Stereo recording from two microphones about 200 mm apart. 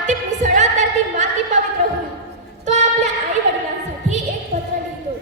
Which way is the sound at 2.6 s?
35° right (ahead or behind).